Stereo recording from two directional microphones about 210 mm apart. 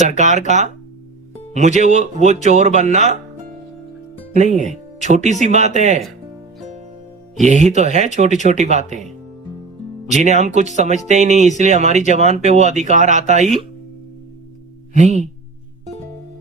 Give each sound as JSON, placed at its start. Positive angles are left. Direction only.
{"t": 0.0, "sound": "speech", "side_deg": -35}
{"t": 4.4, "sound": "speech", "side_deg": -35}
{"t": 4.6, "sound": "music", "side_deg": 35}
{"t": 5.1, "sound": "speech", "side_deg": -35}
{"t": 7.4, "sound": "speech", "side_deg": -35}
{"t": 10.2, "sound": "speech", "side_deg": -35}
{"t": 14.9, "sound": "speech", "side_deg": -35}